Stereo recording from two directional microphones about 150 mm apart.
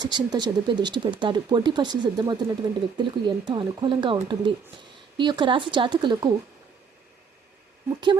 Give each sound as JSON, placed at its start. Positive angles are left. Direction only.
{"t": 0.0, "sound": "speech", "side_deg": -30}